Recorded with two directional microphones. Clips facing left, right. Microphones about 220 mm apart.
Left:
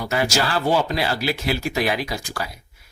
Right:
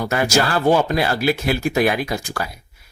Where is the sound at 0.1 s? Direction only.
50° right (ahead or behind).